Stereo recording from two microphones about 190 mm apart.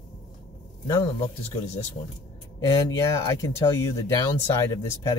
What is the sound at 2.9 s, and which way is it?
Speech, 15° left (ahead or behind).